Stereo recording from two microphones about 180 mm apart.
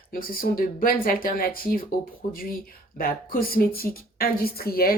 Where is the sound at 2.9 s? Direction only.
55° left (ahead or behind).